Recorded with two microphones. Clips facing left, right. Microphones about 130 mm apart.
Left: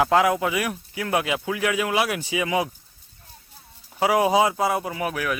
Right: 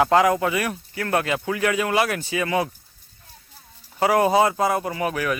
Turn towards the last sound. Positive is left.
turn(degrees=0)  # may be behind; listen again after turning